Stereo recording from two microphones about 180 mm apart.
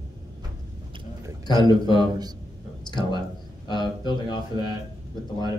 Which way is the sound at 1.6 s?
25° left (ahead or behind).